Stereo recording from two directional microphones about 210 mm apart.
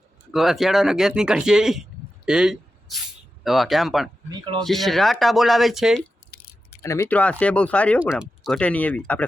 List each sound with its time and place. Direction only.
0.3 s speech: centre (ahead or behind)
4.3 s speech: 20° right (ahead or behind)
4.6 s speech: centre (ahead or behind)
6.8 s speech: 15° left (ahead or behind)